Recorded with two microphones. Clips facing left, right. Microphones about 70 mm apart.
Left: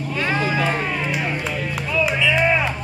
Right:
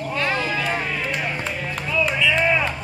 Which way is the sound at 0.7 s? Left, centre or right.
Centre.